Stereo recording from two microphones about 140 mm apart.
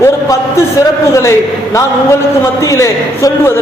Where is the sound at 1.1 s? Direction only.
20° left (ahead or behind).